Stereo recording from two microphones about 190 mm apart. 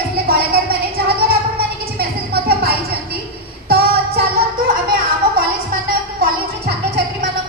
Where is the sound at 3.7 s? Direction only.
55° right (ahead or behind).